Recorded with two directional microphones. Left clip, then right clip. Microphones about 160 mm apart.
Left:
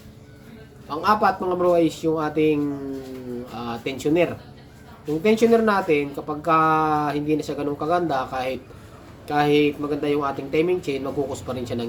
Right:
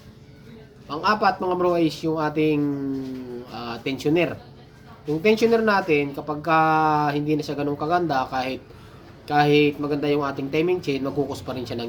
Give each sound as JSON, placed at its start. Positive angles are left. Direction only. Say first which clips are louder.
{"t": 0.9, "sound": "speech", "louder": "left 1 dB", "side_deg": -5}